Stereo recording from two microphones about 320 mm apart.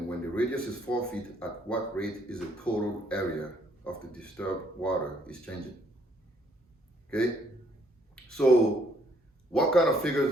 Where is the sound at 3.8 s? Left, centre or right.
Centre.